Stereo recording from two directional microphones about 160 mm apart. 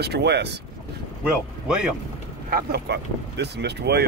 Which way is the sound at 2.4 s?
75° right (ahead or behind).